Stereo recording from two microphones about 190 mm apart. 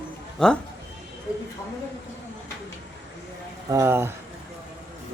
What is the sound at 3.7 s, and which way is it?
Speech, 15° right (ahead or behind).